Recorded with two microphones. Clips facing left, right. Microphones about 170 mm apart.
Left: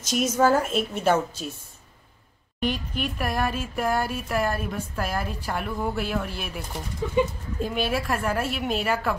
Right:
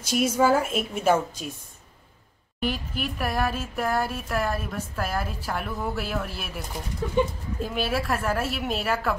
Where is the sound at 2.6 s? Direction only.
5° right (ahead or behind).